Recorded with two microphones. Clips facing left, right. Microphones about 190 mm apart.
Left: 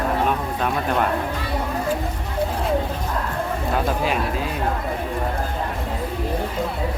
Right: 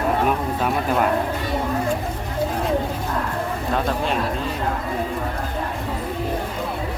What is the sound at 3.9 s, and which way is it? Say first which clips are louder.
Speech: even; 5° left (ahead or behind).